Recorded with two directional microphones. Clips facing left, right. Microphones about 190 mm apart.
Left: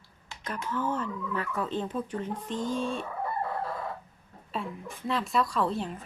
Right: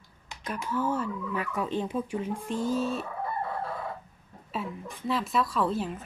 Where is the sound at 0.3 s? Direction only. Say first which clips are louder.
Right 1 dB; 10° right (ahead or behind).